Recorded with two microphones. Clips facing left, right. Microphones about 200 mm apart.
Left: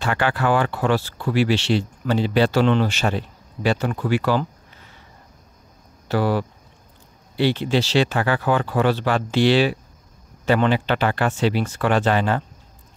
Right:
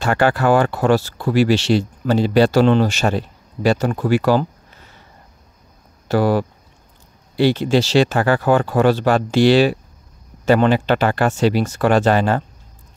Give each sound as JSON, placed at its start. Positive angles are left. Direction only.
{"t": 0.0, "sound": "speech", "side_deg": -45}
{"t": 6.0, "sound": "speech", "side_deg": -45}